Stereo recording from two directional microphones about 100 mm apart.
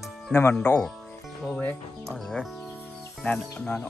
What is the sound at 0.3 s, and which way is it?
Speech, 20° left (ahead or behind).